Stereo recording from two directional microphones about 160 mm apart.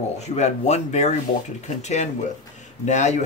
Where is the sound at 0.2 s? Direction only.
45° left (ahead or behind).